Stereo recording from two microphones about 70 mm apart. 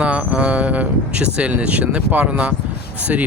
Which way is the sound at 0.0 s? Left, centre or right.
Centre.